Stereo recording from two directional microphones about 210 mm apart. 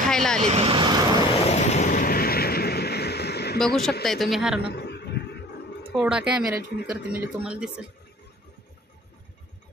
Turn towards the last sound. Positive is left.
turn(degrees=-5)  # may be behind; listen again after turning